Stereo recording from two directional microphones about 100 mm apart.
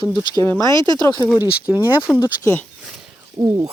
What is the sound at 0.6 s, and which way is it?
Speech, 45° right (ahead or behind).